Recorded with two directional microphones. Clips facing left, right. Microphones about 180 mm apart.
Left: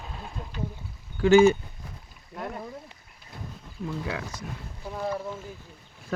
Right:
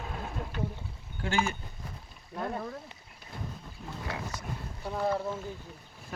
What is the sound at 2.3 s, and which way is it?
Speech, 15° left (ahead or behind).